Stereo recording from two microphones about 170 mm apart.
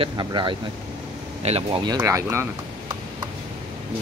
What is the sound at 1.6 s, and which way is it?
Speech, 25° right (ahead or behind).